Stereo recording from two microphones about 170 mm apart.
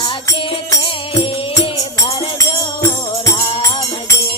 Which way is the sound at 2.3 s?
15° left (ahead or behind).